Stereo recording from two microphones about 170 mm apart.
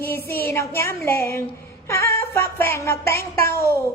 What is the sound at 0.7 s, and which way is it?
Speech, 15° left (ahead or behind).